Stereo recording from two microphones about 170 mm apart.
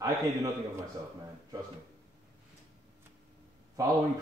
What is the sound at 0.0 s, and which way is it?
Speech, 20° right (ahead or behind).